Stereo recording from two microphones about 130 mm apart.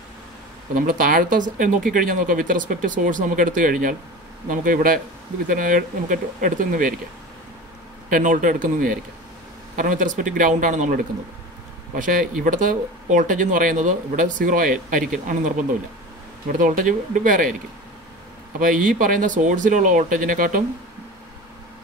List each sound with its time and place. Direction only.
0.7 s speech: 90° right
8.1 s speech: 85° right
11.9 s speech: 90° right
18.6 s speech: 90° right